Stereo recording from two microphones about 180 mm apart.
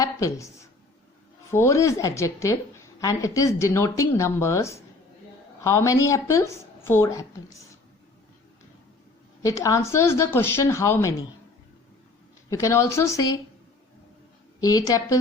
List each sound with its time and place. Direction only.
0.0 s a woman's voice: 20° left (ahead or behind)
9.4 s a woman's voice: 20° left (ahead or behind)
12.5 s a woman's voice: 15° left (ahead or behind)
14.6 s a woman's voice: 20° left (ahead or behind)